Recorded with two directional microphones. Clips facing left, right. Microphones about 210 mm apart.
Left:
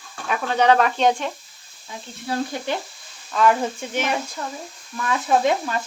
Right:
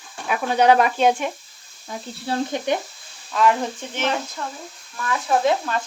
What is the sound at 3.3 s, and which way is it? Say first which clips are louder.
Speech: left 1 dB; centre (ahead or behind).